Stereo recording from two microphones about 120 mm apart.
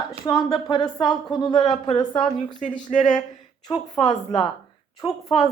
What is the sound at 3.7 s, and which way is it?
Speech, 40° left (ahead or behind).